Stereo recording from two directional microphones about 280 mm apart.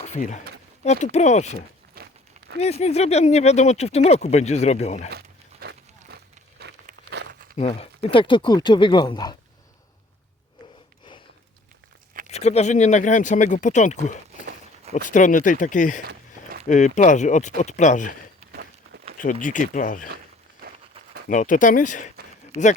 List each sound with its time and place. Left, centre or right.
0.0 s speech: left
2.0 s crumpling: right
2.6 s speech: left
5.1 s pig: right
6.6 s a sound: right
7.5 s speech: left
12.3 s speech: left
16.0 s a sound: right
16.6 s speech: left
19.2 s speech: left
20.6 s a sound: right
21.2 s speech: left